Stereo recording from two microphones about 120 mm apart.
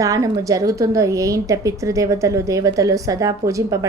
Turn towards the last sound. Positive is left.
turn(degrees=-30)  # may be behind; listen again after turning